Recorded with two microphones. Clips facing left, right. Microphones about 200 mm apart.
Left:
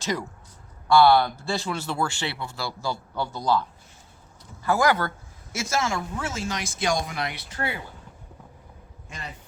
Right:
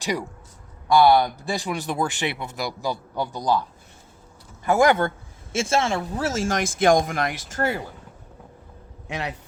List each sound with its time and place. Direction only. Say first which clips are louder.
0.0 s a man's voice: right 2 dB; 15° right (ahead or behind)
4.6 s speech: right 4 dB; 25° right (ahead or behind); by 7.9 s 45° right (ahead or behind)
9.0 s a man's voice: right 10 dB; 70° right (ahead or behind)